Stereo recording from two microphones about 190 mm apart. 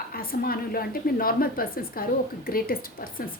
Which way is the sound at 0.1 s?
50° left (ahead or behind).